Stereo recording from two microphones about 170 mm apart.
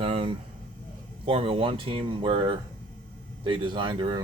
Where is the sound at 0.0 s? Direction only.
35° right (ahead or behind).